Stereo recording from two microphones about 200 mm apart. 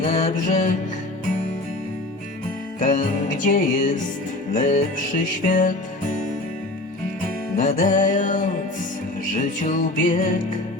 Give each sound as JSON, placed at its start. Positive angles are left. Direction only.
{"t": 0.0, "sound": "music", "side_deg": 35}
{"t": 2.8, "sound": "music", "side_deg": 40}
{"t": 7.5, "sound": "music", "side_deg": 40}